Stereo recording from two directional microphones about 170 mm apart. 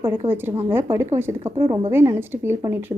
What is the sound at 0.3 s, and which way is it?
A woman's voice, 15° right (ahead or behind).